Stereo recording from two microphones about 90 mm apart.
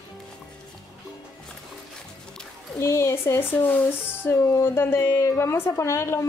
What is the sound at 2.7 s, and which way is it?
A woman's voice, 30° left (ahead or behind).